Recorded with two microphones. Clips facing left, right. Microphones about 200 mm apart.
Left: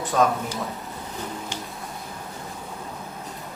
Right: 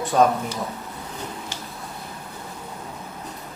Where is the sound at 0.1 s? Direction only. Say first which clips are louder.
Right 3 dB; 35° right (ahead or behind).